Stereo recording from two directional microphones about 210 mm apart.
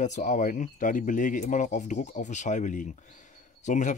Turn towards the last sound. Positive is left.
turn(degrees=35)  # may be behind; listen again after turning